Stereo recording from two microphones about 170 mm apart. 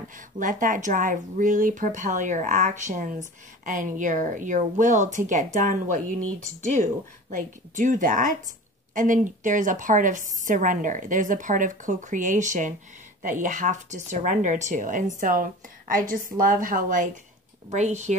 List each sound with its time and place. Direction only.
0.4 s speech: 50° right (ahead or behind)